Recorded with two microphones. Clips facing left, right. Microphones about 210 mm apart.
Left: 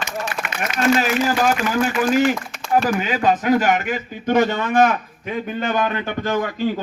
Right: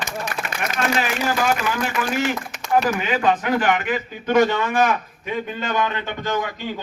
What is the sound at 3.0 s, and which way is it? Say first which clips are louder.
A man's voice: left 1 dB; 40° left (ahead or behind).